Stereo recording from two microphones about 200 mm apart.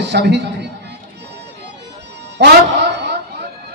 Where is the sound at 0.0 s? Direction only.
60° right (ahead or behind).